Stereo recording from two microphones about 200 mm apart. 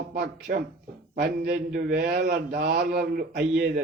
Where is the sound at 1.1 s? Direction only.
45° right (ahead or behind).